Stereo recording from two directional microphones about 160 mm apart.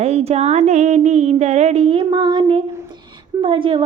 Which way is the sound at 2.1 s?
30° right (ahead or behind).